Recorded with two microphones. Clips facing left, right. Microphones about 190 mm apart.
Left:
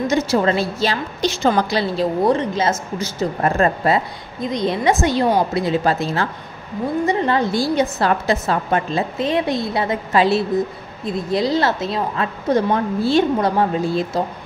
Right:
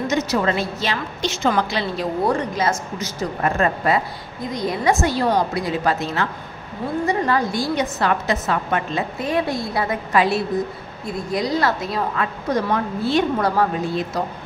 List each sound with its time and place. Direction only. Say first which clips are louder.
0.1 s a woman's voice: left 3 dB; 30° left (ahead or behind)
2.2 s a woman's voice: left 1 dB; 25° left (ahead or behind)